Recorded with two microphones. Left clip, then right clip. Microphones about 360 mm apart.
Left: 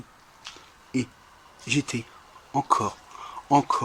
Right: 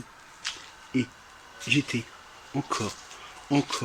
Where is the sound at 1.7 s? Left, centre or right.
Centre.